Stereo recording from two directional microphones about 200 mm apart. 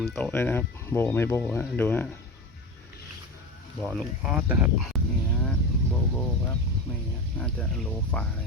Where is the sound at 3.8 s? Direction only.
Centre (ahead or behind).